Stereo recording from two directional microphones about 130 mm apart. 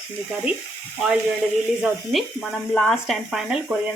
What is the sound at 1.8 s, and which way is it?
Speech, centre (ahead or behind).